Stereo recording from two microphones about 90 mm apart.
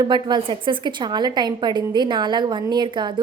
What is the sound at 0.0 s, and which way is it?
A woman's voice, 60° right (ahead or behind).